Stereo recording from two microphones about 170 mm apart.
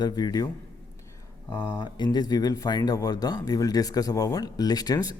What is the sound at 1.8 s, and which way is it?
Speech, 25° left (ahead or behind).